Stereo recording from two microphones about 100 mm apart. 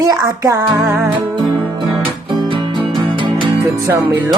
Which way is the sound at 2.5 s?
55° right (ahead or behind).